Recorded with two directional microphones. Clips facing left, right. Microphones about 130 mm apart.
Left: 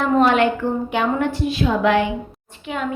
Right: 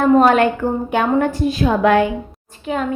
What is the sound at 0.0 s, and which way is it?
A woman's voice, 45° right (ahead or behind).